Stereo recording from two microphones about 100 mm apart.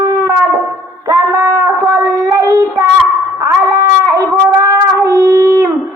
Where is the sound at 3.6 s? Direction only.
35° right (ahead or behind).